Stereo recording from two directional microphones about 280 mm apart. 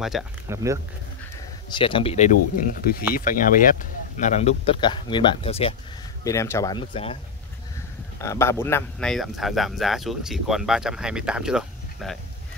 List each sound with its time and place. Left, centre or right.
0.0 s speech: centre
1.7 s speech: centre
6.2 s speech: centre
8.2 s speech: centre